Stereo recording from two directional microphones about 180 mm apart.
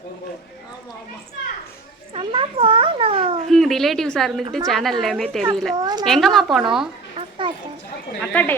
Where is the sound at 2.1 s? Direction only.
30° right (ahead or behind).